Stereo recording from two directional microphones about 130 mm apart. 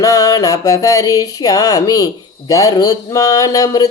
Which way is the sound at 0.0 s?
25° left (ahead or behind).